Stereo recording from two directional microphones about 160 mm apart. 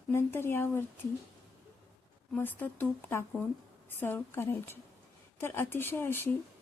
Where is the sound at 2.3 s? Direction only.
10° left (ahead or behind).